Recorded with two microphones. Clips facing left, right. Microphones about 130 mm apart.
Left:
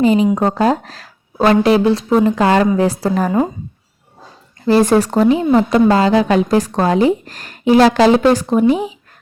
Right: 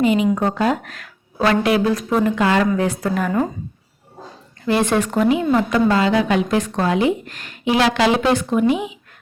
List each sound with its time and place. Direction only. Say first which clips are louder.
0.0 s a woman's voice: left 4 dB; 35° left (ahead or behind)
4.6 s a woman's voice: left 6 dB; 35° left (ahead or behind)